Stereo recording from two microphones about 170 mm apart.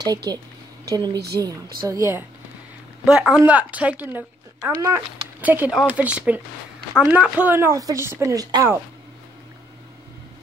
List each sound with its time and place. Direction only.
0.0 s speech: 25° right (ahead or behind)
1.1 s speech: 70° right (ahead or behind)
1.8 s a woman's voice: 20° right (ahead or behind)
3.1 s a woman's voice: 5° right (ahead or behind); by 8.6 s 25° right (ahead or behind)